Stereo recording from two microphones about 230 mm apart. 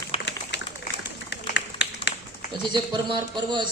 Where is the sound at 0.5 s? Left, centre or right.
Left.